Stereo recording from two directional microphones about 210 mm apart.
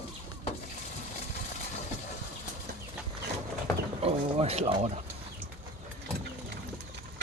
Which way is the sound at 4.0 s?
30° right (ahead or behind).